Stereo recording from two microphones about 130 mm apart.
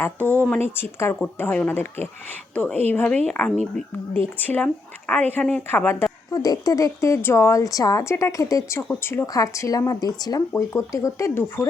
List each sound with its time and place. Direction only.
0.0 s speech: 15° left (ahead or behind)
6.3 s speech: 30° left (ahead or behind)